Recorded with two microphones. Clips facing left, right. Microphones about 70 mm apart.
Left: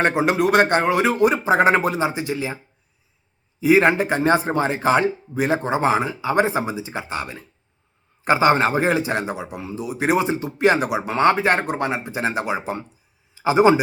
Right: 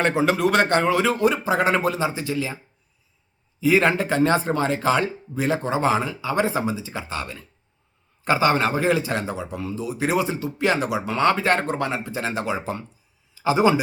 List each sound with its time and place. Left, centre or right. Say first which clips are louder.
0.0 s speech: left 1 dB; left
3.6 s a man's voice: left 3 dB; left